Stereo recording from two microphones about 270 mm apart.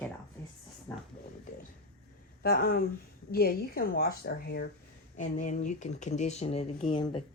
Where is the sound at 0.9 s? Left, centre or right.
Centre.